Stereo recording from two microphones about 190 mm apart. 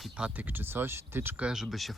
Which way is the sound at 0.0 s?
5° right (ahead or behind).